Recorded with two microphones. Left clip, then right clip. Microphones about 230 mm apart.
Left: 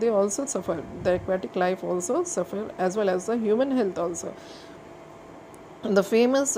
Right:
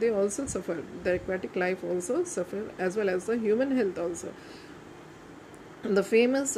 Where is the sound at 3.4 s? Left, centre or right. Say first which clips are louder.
Left 3 dB; left.